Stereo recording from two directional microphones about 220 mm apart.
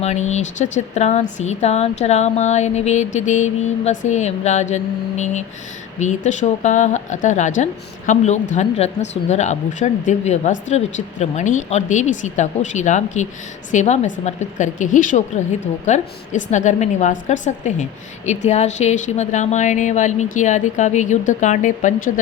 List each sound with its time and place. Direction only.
0.0 s a woman's voice: 30° left (ahead or behind)